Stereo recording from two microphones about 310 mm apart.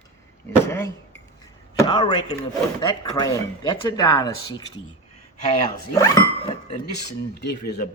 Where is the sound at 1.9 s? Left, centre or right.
Centre.